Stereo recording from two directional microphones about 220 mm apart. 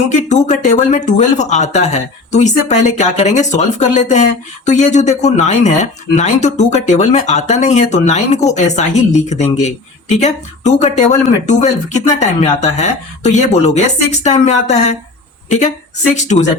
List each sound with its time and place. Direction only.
0.1 s a woman's voice: 35° left (ahead or behind)